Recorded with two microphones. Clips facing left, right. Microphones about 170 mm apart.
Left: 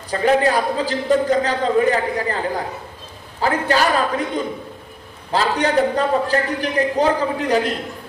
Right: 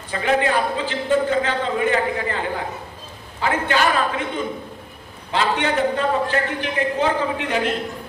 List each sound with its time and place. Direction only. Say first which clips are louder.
0.1 s a man's voice: left 3 dB; 40° left (ahead or behind)
5.3 s a man's voice: left 3 dB; 40° left (ahead or behind)